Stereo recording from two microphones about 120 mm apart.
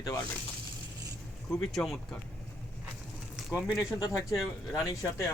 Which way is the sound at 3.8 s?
30° left (ahead or behind).